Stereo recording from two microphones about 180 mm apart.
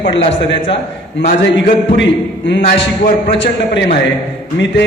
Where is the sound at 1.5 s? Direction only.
85° left.